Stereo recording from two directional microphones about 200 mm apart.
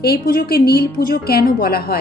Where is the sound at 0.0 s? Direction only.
50° left (ahead or behind).